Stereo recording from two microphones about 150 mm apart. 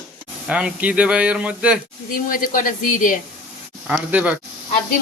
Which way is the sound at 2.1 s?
65° left (ahead or behind).